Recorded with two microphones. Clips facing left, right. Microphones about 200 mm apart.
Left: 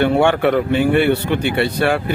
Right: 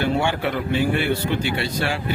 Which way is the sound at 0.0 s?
60° left (ahead or behind).